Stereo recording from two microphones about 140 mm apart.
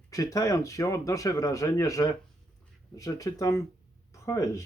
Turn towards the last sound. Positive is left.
turn(degrees=25)  # may be behind; listen again after turning